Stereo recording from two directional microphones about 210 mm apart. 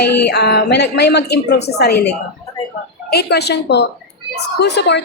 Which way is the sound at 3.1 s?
50° left (ahead or behind).